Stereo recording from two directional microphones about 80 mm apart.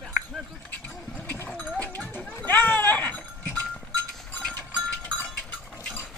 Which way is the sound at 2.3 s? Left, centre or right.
Left.